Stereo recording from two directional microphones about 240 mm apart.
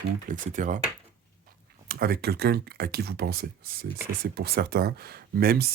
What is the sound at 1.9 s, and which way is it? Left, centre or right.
Speech, right.